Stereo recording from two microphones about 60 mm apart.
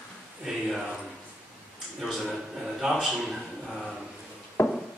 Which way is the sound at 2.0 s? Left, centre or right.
Centre.